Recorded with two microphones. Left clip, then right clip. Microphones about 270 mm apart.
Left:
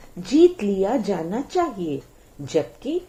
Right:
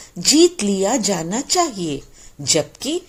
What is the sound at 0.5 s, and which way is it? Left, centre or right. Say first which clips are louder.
Speech: right 3 dB; right.